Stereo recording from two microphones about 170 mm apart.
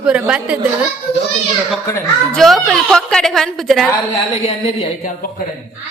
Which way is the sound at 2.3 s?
Centre (ahead or behind).